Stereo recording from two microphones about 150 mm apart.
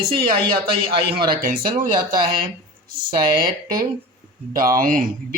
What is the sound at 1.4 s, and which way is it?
Speech, 70° right (ahead or behind).